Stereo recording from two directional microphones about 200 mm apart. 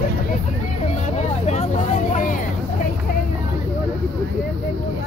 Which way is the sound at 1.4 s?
35° left (ahead or behind).